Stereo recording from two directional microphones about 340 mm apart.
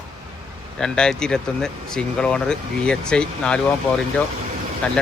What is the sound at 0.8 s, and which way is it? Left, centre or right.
Speech, centre.